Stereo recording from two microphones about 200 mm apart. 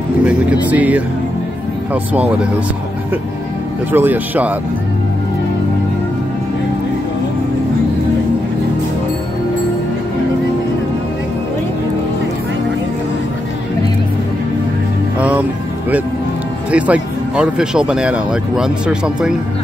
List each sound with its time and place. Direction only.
0.2 s speech: 5° right (ahead or behind)
3.9 s speech: 10° right (ahead or behind)
15.1 s music: 5° right (ahead or behind)
16.7 s speech: 5° right (ahead or behind)